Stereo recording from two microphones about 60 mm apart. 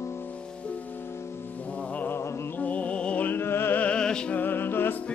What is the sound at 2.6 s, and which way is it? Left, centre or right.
Music, left.